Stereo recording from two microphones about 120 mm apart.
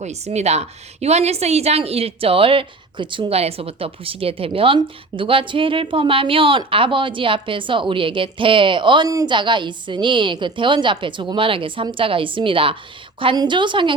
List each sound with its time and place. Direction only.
0.0 s a woman's voice: 65° right (ahead or behind); by 9.0 s 40° right (ahead or behind)
9.0 s a woman's voice: 30° right (ahead or behind)
9.3 s a woman's voice: 40° right (ahead or behind)